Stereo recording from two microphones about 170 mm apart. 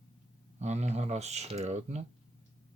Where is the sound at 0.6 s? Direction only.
40° right (ahead or behind).